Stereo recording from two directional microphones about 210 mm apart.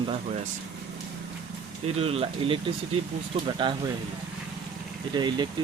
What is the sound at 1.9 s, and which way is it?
Speech, 30° right (ahead or behind).